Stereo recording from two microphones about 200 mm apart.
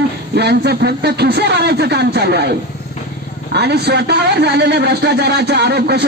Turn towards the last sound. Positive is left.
turn(degrees=-55)  # may be behind; listen again after turning